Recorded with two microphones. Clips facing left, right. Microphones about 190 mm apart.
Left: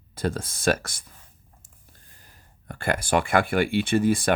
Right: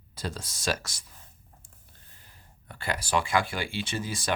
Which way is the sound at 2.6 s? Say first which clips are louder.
Left 7 dB; 50° left (ahead or behind).